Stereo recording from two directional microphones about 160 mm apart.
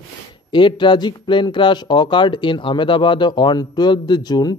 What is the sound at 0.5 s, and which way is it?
Speech, 30° left (ahead or behind).